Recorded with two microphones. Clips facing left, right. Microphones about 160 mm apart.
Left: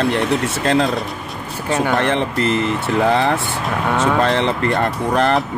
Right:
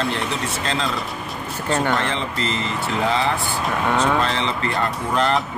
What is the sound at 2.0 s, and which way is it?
Speech, 55° left (ahead or behind).